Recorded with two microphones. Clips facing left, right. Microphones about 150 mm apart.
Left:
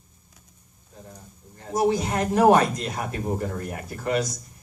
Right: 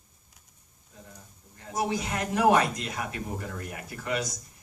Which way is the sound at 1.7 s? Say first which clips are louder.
Left 7 dB; 40° left (ahead or behind).